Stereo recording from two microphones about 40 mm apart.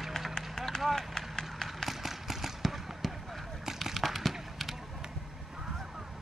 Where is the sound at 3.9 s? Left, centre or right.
Centre.